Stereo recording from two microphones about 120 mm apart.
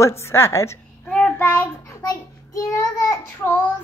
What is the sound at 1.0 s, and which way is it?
Child singing, 10° left (ahead or behind).